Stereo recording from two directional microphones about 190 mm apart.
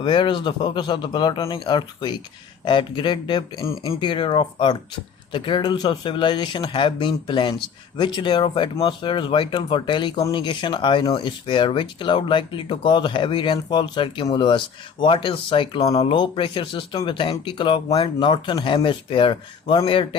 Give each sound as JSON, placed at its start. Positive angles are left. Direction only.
{"t": 0.0, "sound": "speech", "side_deg": 25}